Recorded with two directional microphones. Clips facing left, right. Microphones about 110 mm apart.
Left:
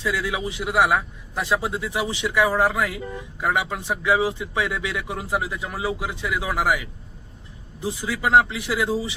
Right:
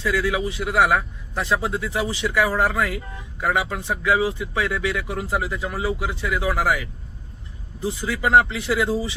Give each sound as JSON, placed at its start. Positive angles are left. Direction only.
{"t": 0.0, "sound": "speech", "side_deg": 20}